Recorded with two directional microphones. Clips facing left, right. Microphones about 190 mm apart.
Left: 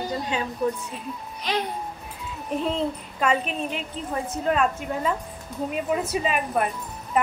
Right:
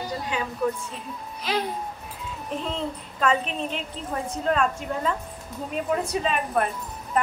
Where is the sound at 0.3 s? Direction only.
25° left (ahead or behind).